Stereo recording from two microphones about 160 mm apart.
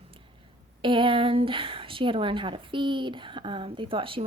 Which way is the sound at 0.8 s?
30° right (ahead or behind).